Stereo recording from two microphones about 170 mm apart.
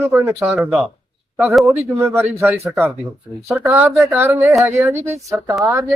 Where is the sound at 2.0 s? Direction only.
15° right (ahead or behind).